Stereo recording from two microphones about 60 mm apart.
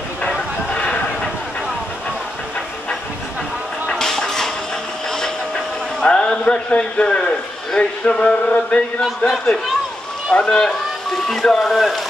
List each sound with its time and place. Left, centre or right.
0.3 s a sound: centre
4.0 s music: centre
6.0 s a man's voice: centre
9.0 s speech: centre
10.3 s speech: centre